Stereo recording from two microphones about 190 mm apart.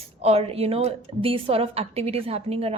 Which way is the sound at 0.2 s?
30° right (ahead or behind).